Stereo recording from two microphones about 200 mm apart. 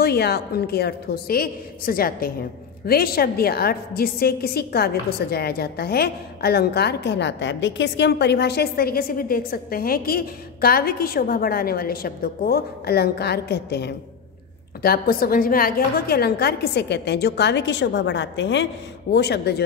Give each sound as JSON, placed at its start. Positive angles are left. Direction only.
{"t": 0.0, "sound": "a woman's voice", "side_deg": 55}